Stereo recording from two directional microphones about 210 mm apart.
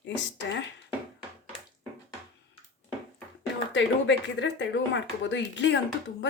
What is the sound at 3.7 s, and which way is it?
Speech, 60° left (ahead or behind).